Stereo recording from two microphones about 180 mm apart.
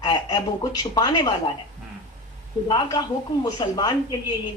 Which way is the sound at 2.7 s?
25° left (ahead or behind).